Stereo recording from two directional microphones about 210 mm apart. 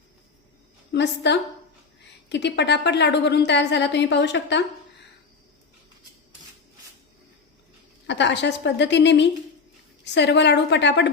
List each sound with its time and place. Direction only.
0.9 s a woman's voice: 55° left (ahead or behind)
8.0 s a woman's voice: 55° left (ahead or behind)